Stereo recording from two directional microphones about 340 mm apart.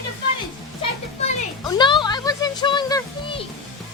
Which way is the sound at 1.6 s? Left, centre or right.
Centre.